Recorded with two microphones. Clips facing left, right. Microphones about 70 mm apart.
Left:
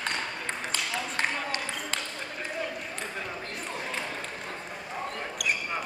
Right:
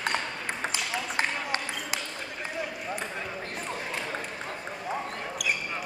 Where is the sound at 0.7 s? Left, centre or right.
Centre.